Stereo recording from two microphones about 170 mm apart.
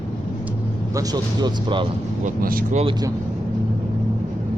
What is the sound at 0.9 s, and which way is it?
Speech, 25° right (ahead or behind).